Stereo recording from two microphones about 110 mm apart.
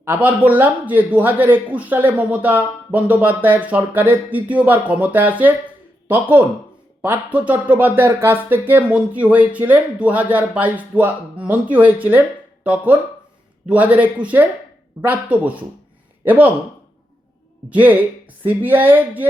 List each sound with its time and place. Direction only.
0.0 s speech: 15° right (ahead or behind)
17.7 s speech: 15° right (ahead or behind)